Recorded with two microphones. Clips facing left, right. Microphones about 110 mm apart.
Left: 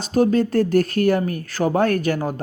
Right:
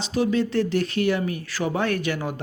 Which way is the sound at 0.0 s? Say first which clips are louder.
Left 5 dB; 45° left (ahead or behind).